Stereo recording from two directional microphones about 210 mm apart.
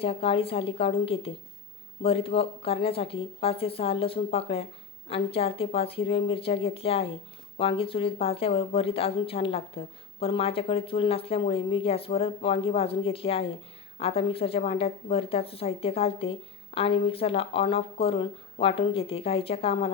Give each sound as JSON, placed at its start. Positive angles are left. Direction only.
{"t": 0.0, "sound": "a woman's voice", "side_deg": 25}